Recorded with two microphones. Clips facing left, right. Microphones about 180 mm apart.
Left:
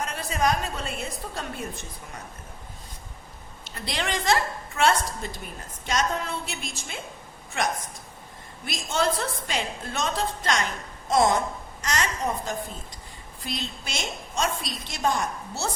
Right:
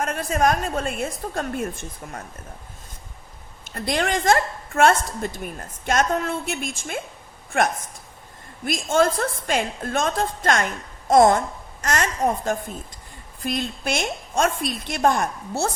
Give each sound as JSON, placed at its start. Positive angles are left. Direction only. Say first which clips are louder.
{"t": 0.0, "sound": "a woman's voice", "louder": "right 5 dB", "side_deg": -50}
{"t": 3.6, "sound": "a woman's voice", "louder": "right 7 dB", "side_deg": -50}